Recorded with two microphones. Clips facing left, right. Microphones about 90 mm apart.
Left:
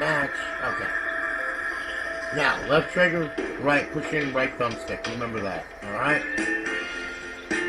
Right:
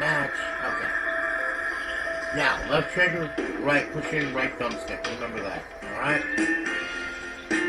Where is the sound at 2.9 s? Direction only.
80° left.